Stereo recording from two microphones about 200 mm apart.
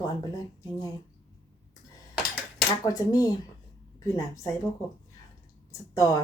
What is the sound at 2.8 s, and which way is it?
A woman's voice, 20° left (ahead or behind).